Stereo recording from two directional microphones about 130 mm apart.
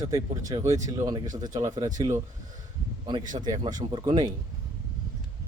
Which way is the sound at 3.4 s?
30° right (ahead or behind).